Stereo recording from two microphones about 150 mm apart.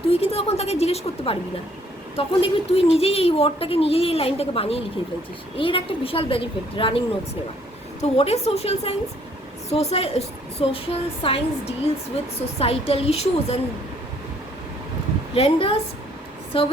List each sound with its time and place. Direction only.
0.1 s a woman's voice: 40° left (ahead or behind)
8.0 s a woman's voice: 40° left (ahead or behind)
15.4 s speech: 40° left (ahead or behind)